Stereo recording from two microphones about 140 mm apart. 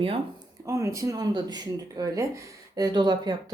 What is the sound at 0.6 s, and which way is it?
Speech, 20° right (ahead or behind).